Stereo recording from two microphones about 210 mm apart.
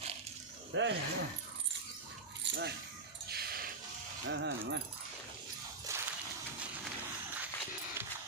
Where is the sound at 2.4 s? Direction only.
55° right (ahead or behind).